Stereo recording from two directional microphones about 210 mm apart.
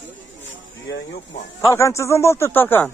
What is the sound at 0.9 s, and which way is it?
Speech, 65° left (ahead or behind).